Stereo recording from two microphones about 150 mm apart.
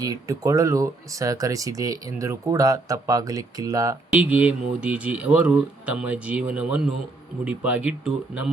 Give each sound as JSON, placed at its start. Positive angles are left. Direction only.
{"t": 0.0, "sound": "speech", "side_deg": -20}
{"t": 4.1, "sound": "speech", "side_deg": -10}